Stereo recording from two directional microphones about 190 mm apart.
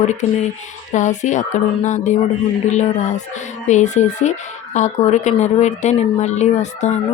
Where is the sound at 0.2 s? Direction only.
35° left (ahead or behind).